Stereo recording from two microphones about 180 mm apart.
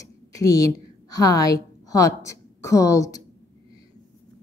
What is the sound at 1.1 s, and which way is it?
A woman's voice, 20° left (ahead or behind).